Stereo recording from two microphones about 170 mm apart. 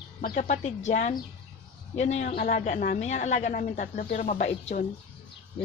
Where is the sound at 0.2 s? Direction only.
50° left (ahead or behind).